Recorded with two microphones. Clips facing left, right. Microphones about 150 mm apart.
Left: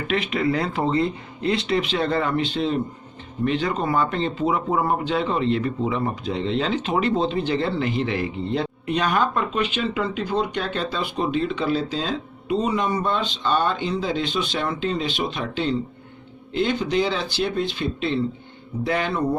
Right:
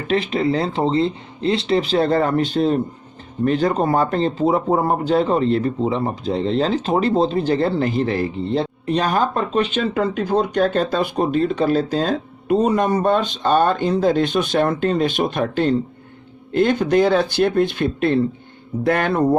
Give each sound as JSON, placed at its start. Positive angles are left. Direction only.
{"t": 0.1, "sound": "speech", "side_deg": -30}